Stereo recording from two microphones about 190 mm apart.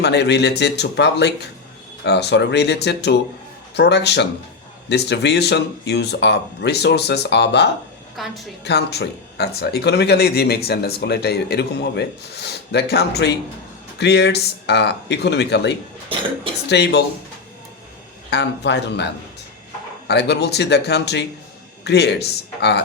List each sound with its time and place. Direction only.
0.0 s speech: 65° left (ahead or behind)
8.2 s a woman's voice: centre (ahead or behind)
8.6 s speech: 60° left (ahead or behind)
18.3 s speech: 65° left (ahead or behind)